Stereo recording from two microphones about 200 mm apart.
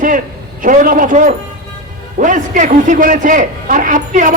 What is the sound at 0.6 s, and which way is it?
A man's voice, 40° right (ahead or behind).